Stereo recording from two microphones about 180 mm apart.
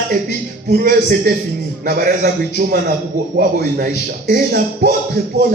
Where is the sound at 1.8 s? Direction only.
50° right (ahead or behind).